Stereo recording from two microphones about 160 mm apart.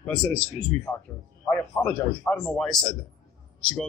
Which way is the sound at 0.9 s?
10° left (ahead or behind).